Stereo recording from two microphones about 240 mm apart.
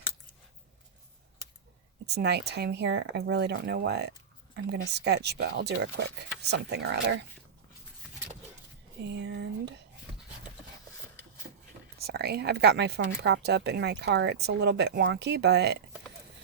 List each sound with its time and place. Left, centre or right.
2.0 s speech: right
9.0 s speech: right
11.9 s speech: right